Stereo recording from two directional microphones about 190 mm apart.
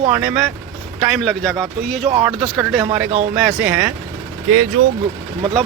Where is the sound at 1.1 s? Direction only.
Centre (ahead or behind).